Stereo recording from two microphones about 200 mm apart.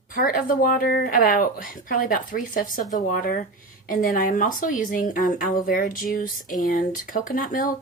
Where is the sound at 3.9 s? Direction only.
40° left (ahead or behind).